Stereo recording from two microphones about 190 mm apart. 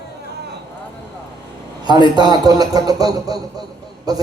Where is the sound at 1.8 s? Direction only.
20° right (ahead or behind).